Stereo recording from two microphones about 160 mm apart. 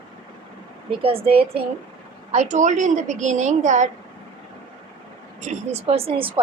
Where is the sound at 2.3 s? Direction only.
45° right (ahead or behind).